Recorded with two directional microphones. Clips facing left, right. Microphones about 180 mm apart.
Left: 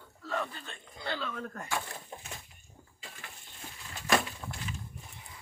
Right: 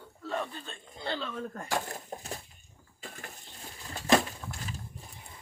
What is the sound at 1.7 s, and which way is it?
Speech, 45° right (ahead or behind).